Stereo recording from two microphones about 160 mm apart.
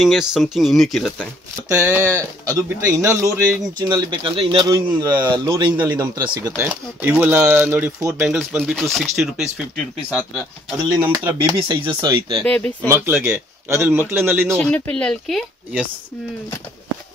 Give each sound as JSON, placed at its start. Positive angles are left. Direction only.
{"t": 0.0, "sound": "speech", "side_deg": -5}
{"t": 1.7, "sound": "a man's voice", "side_deg": -15}
{"t": 6.5, "sound": "speech", "side_deg": -10}
{"t": 11.0, "sound": "a man's voice", "side_deg": -15}
{"t": 11.7, "sound": "speech", "side_deg": -30}
{"t": 12.4, "sound": "speech", "side_deg": 10}
{"t": 12.9, "sound": "speech", "side_deg": -15}
{"t": 14.6, "sound": "speech", "side_deg": 10}